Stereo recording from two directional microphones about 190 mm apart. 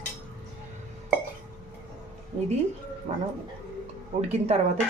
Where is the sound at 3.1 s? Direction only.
35° right (ahead or behind).